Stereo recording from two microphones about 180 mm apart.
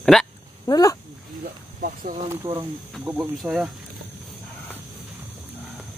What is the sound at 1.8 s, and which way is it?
Speech, 50° right (ahead or behind).